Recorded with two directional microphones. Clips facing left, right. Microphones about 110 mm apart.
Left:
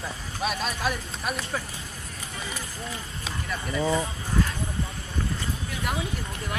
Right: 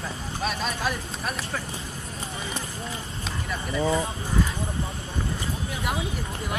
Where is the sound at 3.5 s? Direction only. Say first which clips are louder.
Right 1 dB; 5° right (ahead or behind).